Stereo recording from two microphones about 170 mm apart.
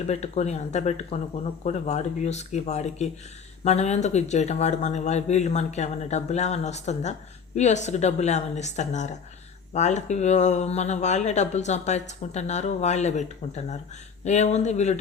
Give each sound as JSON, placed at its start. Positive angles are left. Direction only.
{"t": 0.1, "sound": "speech", "side_deg": 40}